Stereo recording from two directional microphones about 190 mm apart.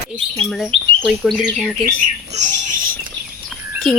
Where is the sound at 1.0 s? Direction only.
Centre (ahead or behind).